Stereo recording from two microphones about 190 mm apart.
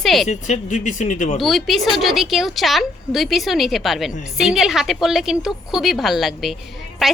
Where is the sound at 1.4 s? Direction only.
Centre (ahead or behind).